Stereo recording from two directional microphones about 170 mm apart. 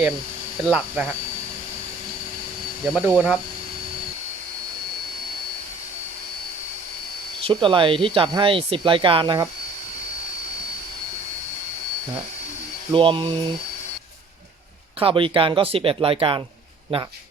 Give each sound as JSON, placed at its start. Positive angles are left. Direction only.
{"t": 0.7, "sound": "speech", "side_deg": -10}
{"t": 2.8, "sound": "speech", "side_deg": -5}
{"t": 7.4, "sound": "speech", "side_deg": -30}
{"t": 12.9, "sound": "speech", "side_deg": -30}
{"t": 14.9, "sound": "speech", "side_deg": -30}